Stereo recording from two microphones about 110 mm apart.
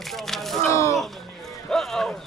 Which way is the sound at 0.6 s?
25° left (ahead or behind).